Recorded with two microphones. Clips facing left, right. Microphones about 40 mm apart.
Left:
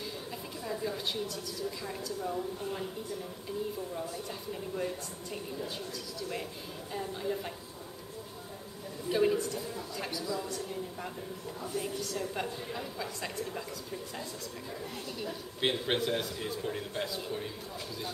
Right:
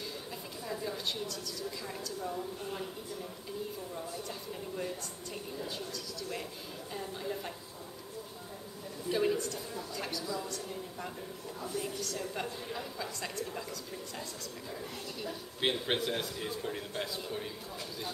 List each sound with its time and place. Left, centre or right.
0.7 s a woman's voice: centre
4.1 s speech: centre
9.1 s a man's voice: centre
14.7 s a man's voice: centre